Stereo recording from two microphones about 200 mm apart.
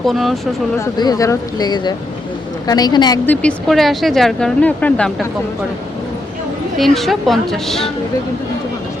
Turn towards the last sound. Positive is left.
turn(degrees=0)  # may be behind; listen again after turning